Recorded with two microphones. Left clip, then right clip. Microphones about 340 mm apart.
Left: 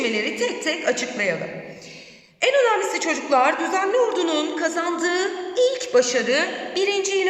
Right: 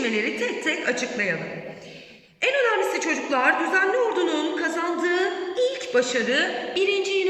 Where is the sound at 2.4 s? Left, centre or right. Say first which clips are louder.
Left 3 dB; centre.